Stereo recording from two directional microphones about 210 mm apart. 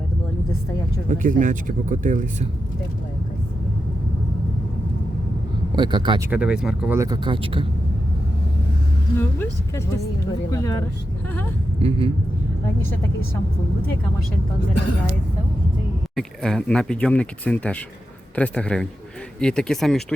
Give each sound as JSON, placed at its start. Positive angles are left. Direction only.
{"t": 1.0, "sound": "speech", "side_deg": -40}
{"t": 5.7, "sound": "speech", "side_deg": -20}
{"t": 6.3, "sound": "speech", "side_deg": -5}
{"t": 9.1, "sound": "speech", "side_deg": 10}
{"t": 11.8, "sound": "speech", "side_deg": -25}
{"t": 16.1, "sound": "speech", "side_deg": 0}